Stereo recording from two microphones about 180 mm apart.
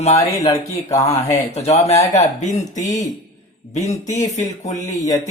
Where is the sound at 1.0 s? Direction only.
35° left (ahead or behind).